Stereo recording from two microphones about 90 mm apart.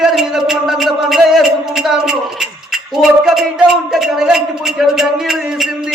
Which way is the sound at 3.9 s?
5° right (ahead or behind).